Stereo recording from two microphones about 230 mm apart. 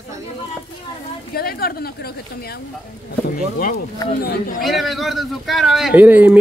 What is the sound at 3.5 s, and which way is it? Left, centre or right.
Speech, left.